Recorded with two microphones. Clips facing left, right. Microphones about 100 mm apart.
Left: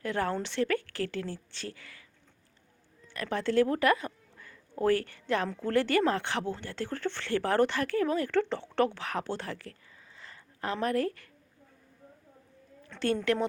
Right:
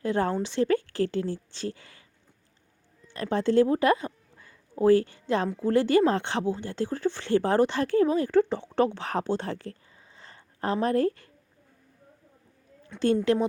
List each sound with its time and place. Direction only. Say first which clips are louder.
0.0 s a woman's voice: right 5 dB; 25° right (ahead or behind)
3.1 s a woman's voice: right 5 dB; 25° right (ahead or behind)
9.0 s a woman's voice: right 6 dB; 30° right (ahead or behind)
10.2 s a sound: right 4 dB; 30° right (ahead or behind)
12.9 s speech: right 6 dB; 5° right (ahead or behind)